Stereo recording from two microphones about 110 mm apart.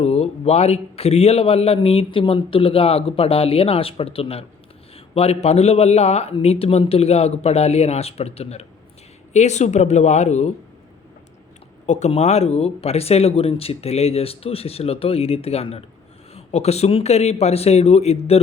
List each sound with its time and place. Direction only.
0.0 s a man's voice: 70° left (ahead or behind)
9.3 s speech: 90° left
11.9 s a man's voice: 85° left; by 18.3 s 70° left (ahead or behind)